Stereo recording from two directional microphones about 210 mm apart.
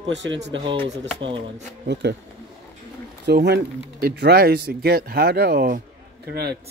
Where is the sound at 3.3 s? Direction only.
50° right (ahead or behind).